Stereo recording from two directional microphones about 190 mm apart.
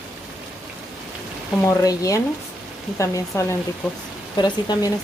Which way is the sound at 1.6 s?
20° left (ahead or behind).